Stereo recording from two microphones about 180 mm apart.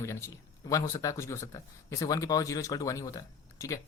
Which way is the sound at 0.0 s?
15° left (ahead or behind).